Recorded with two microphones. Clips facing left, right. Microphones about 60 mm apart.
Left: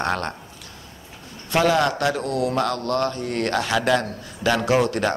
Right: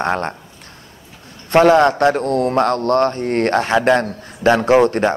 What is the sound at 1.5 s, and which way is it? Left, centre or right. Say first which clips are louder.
A man's voice: right 8 dB; right.